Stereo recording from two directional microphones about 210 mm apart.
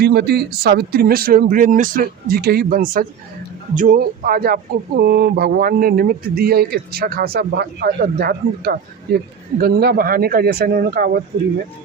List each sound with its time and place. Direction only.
0.0 s speech: 50° right (ahead or behind)